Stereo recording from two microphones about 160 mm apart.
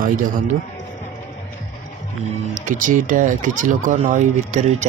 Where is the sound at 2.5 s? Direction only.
55° right (ahead or behind).